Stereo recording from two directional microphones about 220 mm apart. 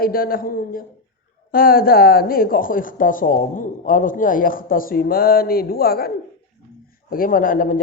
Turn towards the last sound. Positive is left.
turn(degrees=40)  # may be behind; listen again after turning